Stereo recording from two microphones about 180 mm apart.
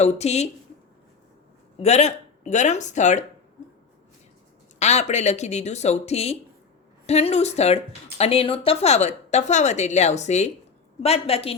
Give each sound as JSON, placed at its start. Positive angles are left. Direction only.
{"t": 0.0, "sound": "speech", "side_deg": 40}
{"t": 1.8, "sound": "speech", "side_deg": 40}
{"t": 4.8, "sound": "speech", "side_deg": 40}